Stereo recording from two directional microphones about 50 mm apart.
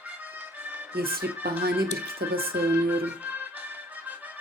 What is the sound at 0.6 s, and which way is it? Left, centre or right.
Music, right.